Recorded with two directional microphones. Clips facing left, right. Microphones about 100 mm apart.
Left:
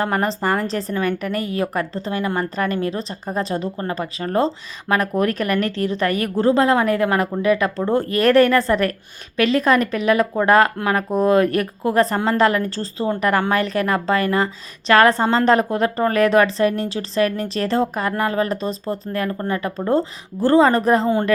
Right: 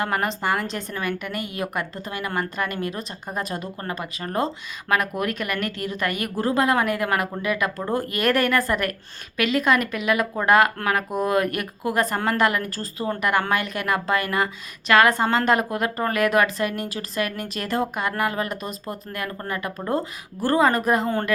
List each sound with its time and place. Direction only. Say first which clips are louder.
0.0 s a woman's voice: left 4 dB; 35° left (ahead or behind)